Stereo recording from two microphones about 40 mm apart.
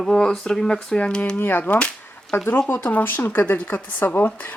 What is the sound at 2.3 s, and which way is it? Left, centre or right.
Speech, left.